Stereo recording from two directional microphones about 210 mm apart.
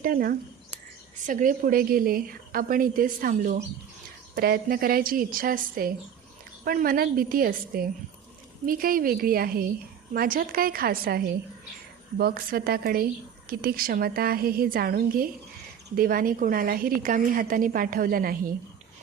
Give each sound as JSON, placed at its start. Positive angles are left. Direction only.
{"t": 0.0, "sound": "a woman's voice", "side_deg": -45}